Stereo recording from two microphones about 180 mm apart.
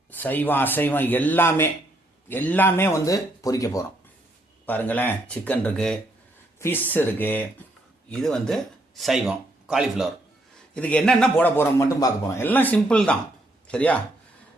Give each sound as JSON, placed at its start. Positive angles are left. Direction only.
{"t": 0.1, "sound": "a man's voice", "side_deg": 10}
{"t": 10.8, "sound": "a man's voice", "side_deg": 5}